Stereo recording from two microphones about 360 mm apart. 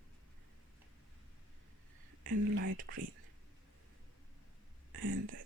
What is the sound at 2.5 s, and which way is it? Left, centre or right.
Whispering, right.